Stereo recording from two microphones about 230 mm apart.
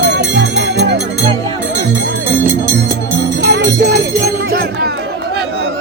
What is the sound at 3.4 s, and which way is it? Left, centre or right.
Music, right.